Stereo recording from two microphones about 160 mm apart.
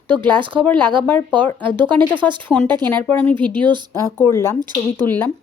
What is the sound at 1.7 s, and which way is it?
Speech, 30° right (ahead or behind).